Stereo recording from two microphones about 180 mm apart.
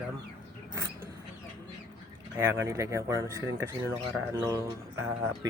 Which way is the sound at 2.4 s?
15° right (ahead or behind).